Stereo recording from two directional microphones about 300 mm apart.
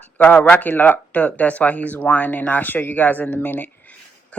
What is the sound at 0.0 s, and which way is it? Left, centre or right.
Speech, centre.